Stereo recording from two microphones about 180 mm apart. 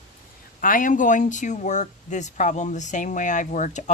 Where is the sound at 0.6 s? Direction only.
50° left (ahead or behind).